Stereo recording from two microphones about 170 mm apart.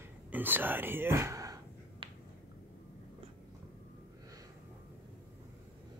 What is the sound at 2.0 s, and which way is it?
Finger snapping, 30° right (ahead or behind).